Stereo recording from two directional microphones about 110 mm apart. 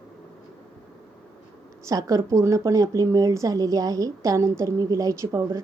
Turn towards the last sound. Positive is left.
turn(degrees=-30)  # may be behind; listen again after turning